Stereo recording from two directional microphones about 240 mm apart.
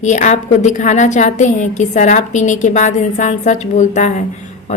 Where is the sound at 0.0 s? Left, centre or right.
Left.